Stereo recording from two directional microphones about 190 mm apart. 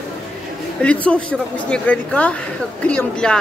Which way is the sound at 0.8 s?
5° left (ahead or behind).